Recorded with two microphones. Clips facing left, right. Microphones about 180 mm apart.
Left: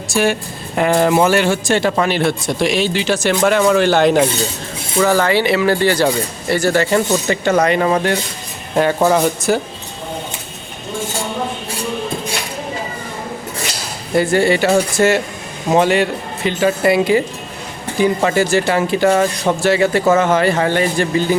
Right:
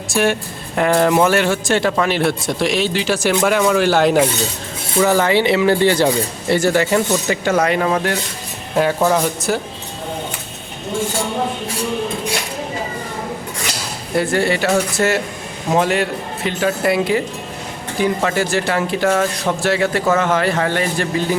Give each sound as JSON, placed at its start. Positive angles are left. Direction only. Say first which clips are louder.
{"t": 0.1, "sound": "a man's voice", "louder": "left 1 dB", "side_deg": 0}
{"t": 4.9, "sound": "speech", "louder": "even", "side_deg": -15}
{"t": 7.3, "sound": "a man's voice", "louder": "left 2 dB", "side_deg": -5}
{"t": 14.2, "sound": "a man's voice", "louder": "left 3 dB", "side_deg": 0}